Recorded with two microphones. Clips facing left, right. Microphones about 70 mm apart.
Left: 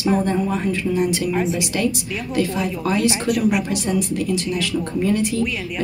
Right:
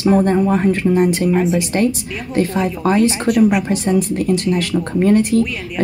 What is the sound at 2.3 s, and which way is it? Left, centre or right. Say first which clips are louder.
A woman's voice: right 4 dB; right.